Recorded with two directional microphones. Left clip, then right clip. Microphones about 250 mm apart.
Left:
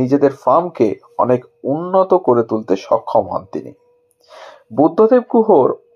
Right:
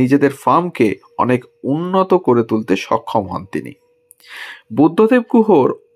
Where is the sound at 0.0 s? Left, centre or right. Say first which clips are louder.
Even; right.